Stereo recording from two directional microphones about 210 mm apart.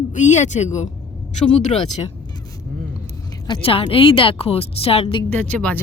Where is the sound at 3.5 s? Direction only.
25° left (ahead or behind).